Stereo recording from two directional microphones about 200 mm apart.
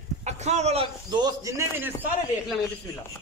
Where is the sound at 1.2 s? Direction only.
15° right (ahead or behind).